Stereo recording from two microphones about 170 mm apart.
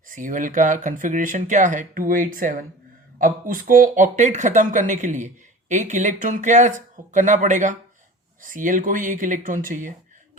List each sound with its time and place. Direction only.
0.1 s speech: 50° right (ahead or behind)